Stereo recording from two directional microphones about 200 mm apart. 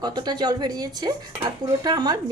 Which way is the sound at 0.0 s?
20° right (ahead or behind).